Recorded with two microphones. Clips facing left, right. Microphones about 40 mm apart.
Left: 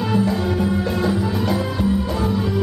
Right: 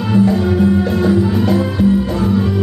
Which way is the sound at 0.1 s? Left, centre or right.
Centre.